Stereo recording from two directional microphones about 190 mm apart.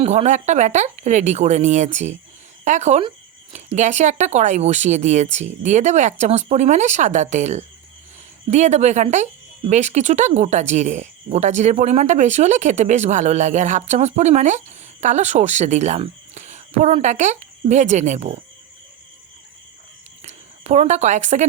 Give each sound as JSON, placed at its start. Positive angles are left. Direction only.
{"t": 0.0, "sound": "a woman's voice", "side_deg": -35}
{"t": 20.2, "sound": "a woman's voice", "side_deg": -35}